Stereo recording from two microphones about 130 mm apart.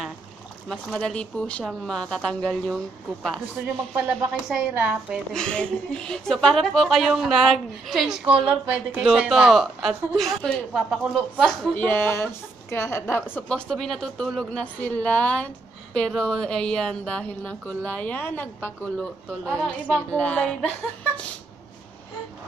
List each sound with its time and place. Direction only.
0.7 s a woman's voice: 5° left (ahead or behind)
3.9 s a woman's voice: 5° right (ahead or behind)
5.3 s a woman's voice: 5° left (ahead or behind)
13.5 s speech: 5° left (ahead or behind)